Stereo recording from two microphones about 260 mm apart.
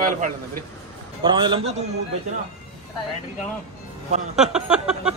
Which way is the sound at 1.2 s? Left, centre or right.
Centre.